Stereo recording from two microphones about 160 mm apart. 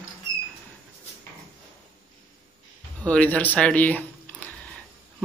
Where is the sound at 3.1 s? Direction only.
10° left (ahead or behind).